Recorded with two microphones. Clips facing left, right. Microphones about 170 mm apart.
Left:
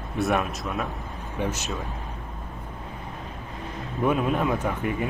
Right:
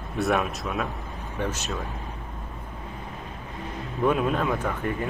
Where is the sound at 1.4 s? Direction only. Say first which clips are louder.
Left 1 dB; 10° left (ahead or behind).